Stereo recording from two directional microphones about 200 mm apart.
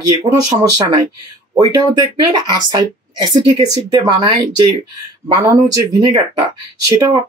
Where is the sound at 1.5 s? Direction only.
20° right (ahead or behind).